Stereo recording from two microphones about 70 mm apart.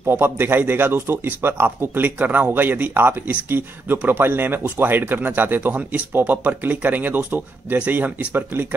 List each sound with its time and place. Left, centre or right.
0.0 s speech: right